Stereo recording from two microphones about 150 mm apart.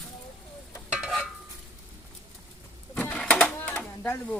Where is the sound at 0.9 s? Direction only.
5° right (ahead or behind).